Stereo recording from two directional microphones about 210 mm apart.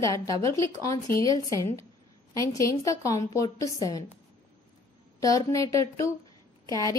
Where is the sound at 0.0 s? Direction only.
15° left (ahead or behind).